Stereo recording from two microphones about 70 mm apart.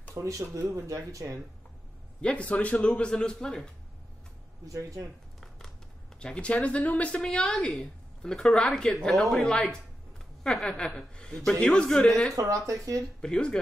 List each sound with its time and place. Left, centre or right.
0.1 s speech: right
2.2 s a woman's voice: centre
4.6 s speech: right
6.1 s a woman's voice: centre
12.4 s speech: right
13.2 s a woman's voice: centre